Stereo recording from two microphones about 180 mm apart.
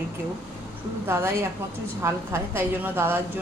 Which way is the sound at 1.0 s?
15° right (ahead or behind).